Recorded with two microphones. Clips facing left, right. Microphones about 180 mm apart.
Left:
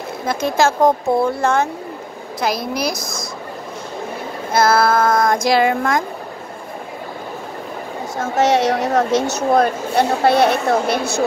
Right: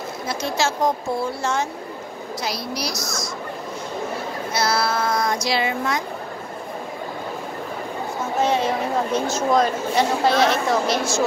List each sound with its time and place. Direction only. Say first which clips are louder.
0.3 s speech: left 7 dB; 55° left (ahead or behind)
4.5 s speech: left 8 dB; 50° left (ahead or behind)
8.2 s a woman's voice: left 5 dB; 80° left; by 11.2 s 60° left (ahead or behind)